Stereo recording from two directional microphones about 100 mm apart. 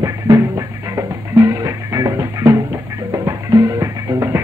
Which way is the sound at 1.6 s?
35° right (ahead or behind).